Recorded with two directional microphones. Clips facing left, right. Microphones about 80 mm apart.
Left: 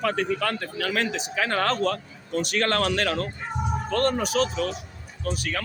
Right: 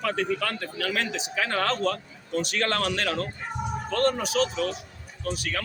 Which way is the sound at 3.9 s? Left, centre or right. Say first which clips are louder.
Left 1 dB; left.